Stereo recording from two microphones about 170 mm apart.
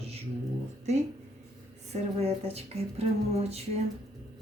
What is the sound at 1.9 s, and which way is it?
Speech, 35° right (ahead or behind).